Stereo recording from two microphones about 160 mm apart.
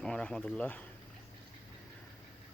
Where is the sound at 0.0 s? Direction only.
5° left (ahead or behind).